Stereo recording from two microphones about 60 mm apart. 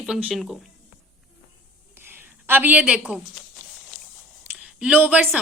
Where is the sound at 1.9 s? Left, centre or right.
Right.